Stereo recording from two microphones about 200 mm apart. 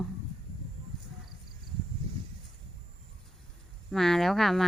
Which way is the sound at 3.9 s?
Centre (ahead or behind).